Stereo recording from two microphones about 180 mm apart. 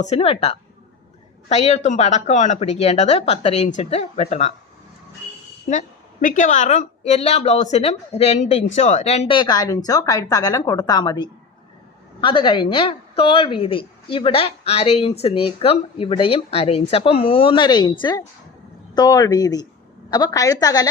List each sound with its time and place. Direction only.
0.0 s speech: 35° left (ahead or behind)
6.2 s a woman's voice: 45° left (ahead or behind); by 20.8 s 20° left (ahead or behind)